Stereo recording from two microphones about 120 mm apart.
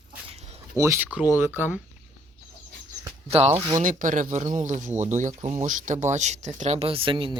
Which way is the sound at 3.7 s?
90° right.